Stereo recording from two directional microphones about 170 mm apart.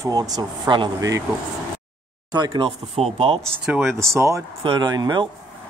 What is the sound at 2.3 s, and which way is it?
Speech, 25° right (ahead or behind).